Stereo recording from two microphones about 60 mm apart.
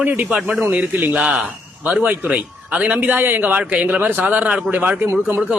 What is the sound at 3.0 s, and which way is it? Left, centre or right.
A man's voice, right.